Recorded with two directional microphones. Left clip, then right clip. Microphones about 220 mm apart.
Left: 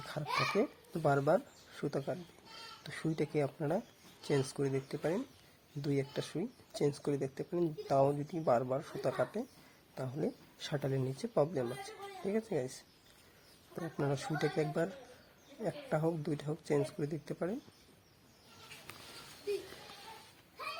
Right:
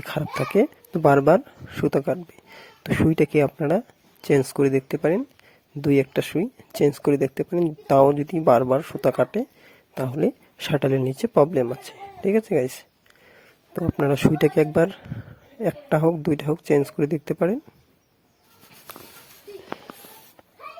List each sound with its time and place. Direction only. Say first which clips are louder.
0.1 s speech: right 10 dB; 40° right (ahead or behind)
13.7 s speech: right 15 dB; 40° right (ahead or behind)